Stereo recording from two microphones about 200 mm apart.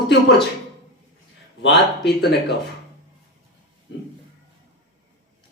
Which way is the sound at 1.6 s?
55° left (ahead or behind).